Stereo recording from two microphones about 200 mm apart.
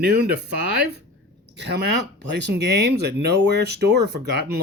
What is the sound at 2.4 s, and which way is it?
Speech, 55° right (ahead or behind).